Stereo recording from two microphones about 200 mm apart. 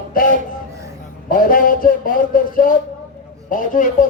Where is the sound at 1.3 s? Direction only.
45° left (ahead or behind).